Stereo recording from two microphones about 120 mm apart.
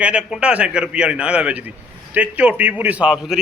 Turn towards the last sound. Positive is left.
turn(degrees=-5)  # may be behind; listen again after turning